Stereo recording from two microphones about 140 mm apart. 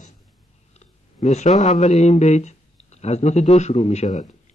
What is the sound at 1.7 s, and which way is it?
Speech, 55° left (ahead or behind).